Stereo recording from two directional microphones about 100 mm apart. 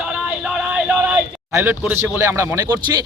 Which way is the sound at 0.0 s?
10° right (ahead or behind).